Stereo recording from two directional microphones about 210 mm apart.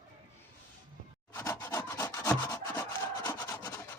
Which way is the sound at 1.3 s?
15° left (ahead or behind).